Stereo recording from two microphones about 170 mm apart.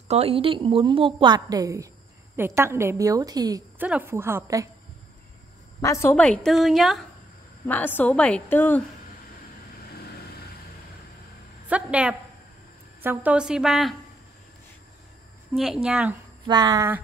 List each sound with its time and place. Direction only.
0.1 s a woman's voice: 35° right (ahead or behind)
3.7 s a woman's voice: 10° right (ahead or behind)
5.8 s a woman's voice: 15° left (ahead or behind)
6.4 s a woman's voice: centre (ahead or behind)
7.6 s a woman's voice: 10° left (ahead or behind)
11.7 s a woman's voice: 5° right (ahead or behind)
15.5 s a woman's voice: centre (ahead or behind)
16.4 s speech: 25° right (ahead or behind)